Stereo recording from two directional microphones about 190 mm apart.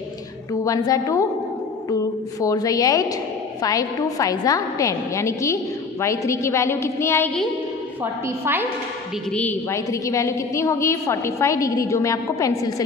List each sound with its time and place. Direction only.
0.5 s a woman's voice: 20° left (ahead or behind)
2.4 s a woman's voice: 20° left (ahead or behind)
8.0 s a woman's voice: 10° right (ahead or behind)
9.3 s a woman's voice: 10° left (ahead or behind)